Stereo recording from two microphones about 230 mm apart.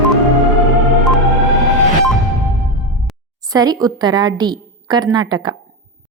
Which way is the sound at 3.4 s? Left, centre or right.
Centre.